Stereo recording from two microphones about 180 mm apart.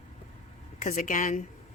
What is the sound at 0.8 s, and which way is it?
Speech, 50° left (ahead or behind).